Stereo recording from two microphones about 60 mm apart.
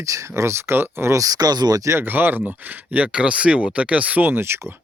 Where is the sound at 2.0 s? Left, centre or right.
Right.